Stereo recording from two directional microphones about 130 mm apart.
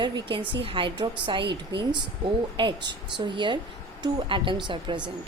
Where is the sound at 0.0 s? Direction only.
40° right (ahead or behind).